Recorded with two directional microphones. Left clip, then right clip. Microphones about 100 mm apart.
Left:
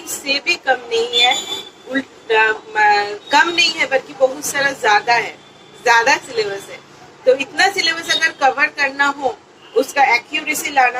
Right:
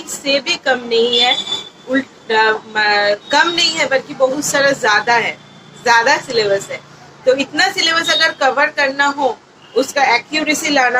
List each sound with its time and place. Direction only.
0.3 s speech: 35° right (ahead or behind)